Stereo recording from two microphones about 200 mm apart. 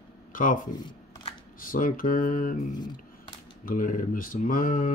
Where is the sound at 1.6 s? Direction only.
45° left (ahead or behind).